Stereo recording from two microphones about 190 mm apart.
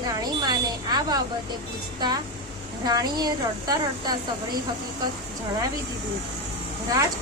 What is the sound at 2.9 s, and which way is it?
A woman's voice, 20° right (ahead or behind).